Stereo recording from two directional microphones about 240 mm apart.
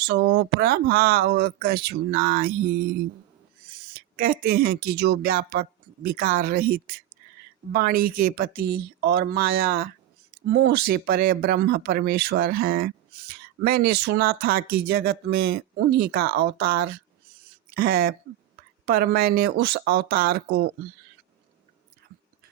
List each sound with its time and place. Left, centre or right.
0.0 s speech: right
3.9 s speech: right